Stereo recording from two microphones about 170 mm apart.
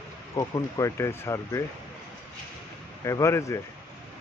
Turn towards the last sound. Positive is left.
turn(degrees=15)  # may be behind; listen again after turning